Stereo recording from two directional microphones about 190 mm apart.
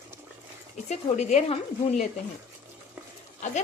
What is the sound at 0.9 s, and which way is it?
Speech, 35° left (ahead or behind).